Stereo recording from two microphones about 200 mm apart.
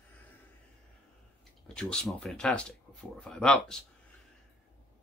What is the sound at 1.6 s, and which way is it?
Speech, 5° left (ahead or behind).